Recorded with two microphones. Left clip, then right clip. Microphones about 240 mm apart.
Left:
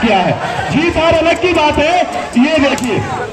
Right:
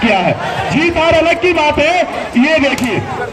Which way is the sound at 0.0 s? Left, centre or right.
Right.